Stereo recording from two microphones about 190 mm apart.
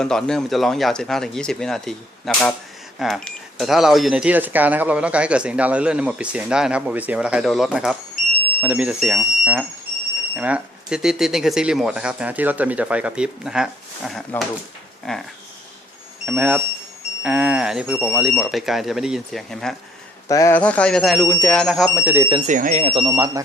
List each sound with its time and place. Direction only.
0.0 s speech: 5° left (ahead or behind)
20.2 s a man's voice: 15° left (ahead or behind)
20.6 s speech: 5° left (ahead or behind); by 22.3 s 10° right (ahead or behind)
22.4 s speech: 40° right (ahead or behind); by 23.4 s 20° right (ahead or behind)